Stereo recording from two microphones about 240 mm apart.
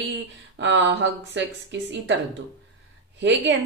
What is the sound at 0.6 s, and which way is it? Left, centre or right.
A woman's voice, right.